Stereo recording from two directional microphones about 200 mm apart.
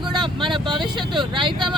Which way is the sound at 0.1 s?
25° right (ahead or behind).